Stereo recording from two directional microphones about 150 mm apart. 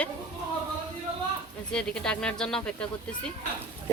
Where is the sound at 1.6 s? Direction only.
5° left (ahead or behind).